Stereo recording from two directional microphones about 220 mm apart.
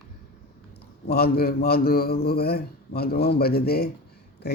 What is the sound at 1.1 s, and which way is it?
A man's voice, 45° left (ahead or behind).